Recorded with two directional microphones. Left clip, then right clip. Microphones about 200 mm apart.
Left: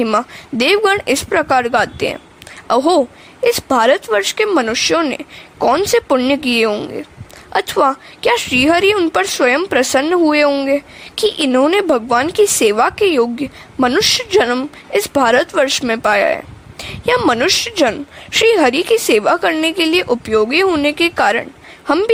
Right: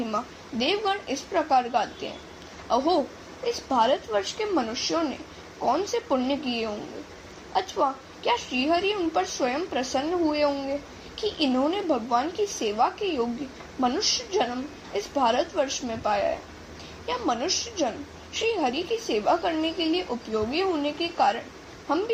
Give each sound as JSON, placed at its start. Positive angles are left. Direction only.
{"t": 0.6, "sound": "a woman's voice", "side_deg": 50}